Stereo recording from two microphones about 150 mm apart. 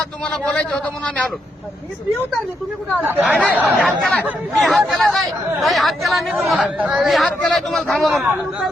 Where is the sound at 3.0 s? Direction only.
10° right (ahead or behind).